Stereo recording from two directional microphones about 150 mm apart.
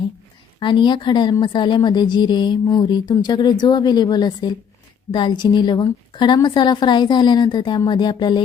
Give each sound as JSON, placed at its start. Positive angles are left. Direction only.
{"t": 0.6, "sound": "a woman's voice", "side_deg": 30}